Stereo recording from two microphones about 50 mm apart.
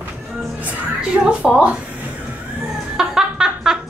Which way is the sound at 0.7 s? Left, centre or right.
Right.